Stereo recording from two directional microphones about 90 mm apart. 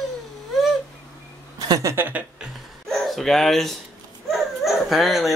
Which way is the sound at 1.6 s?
40° right (ahead or behind).